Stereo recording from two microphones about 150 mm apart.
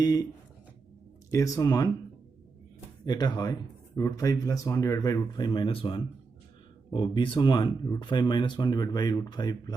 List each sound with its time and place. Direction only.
0.0 s speech: 25° left (ahead or behind)
1.3 s speech: 20° left (ahead or behind)
3.1 s speech: 25° left (ahead or behind)